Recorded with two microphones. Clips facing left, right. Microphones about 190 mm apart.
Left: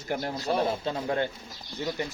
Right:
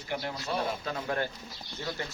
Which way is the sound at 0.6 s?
25° left (ahead or behind).